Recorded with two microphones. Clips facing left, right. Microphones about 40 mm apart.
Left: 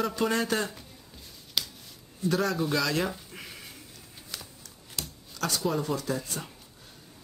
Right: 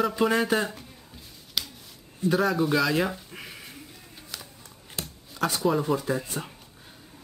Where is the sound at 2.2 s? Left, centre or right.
Centre.